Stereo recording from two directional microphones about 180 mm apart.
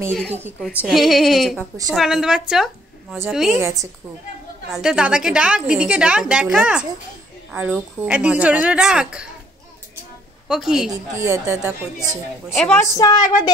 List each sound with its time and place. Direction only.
0.3 s a woman's voice: 10° right (ahead or behind)
0.8 s a woman's voice: centre (ahead or behind)
3.5 s a woman's voice: 15° right (ahead or behind)
4.7 s a woman's voice: 5° right (ahead or behind)
10.5 s a woman's voice: 5° right (ahead or behind)
11.1 s a woman's voice: 15° right (ahead or behind)
12.5 s a woman's voice: 5° left (ahead or behind)
12.9 s a sound: 20° left (ahead or behind)